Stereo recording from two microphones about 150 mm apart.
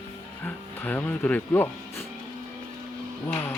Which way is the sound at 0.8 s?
10° left (ahead or behind).